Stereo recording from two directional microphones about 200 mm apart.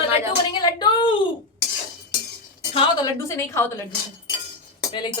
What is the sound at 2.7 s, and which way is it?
Speech, 20° left (ahead or behind).